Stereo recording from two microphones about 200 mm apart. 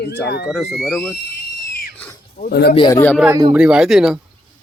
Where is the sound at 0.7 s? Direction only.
Centre (ahead or behind).